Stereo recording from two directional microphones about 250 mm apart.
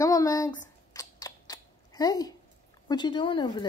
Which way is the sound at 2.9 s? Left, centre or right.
Centre.